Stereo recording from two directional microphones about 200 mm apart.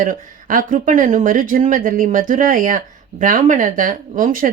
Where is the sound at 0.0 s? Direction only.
40° right (ahead or behind).